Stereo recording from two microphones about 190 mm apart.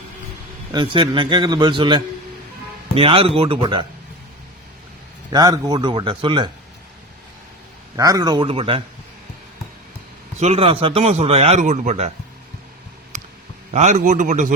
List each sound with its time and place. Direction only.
0.7 s a man's voice: 25° right (ahead or behind)
5.3 s a man's voice: 20° right (ahead or behind)
7.9 s a man's voice: 20° right (ahead or behind)
10.4 s speech: 35° right (ahead or behind)
13.1 s a sound: 40° right (ahead or behind)
13.7 s speech: 40° right (ahead or behind)